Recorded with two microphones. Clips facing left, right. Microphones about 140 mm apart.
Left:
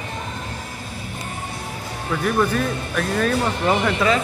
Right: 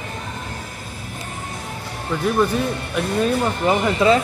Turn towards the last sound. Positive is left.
turn(degrees=-25)  # may be behind; listen again after turning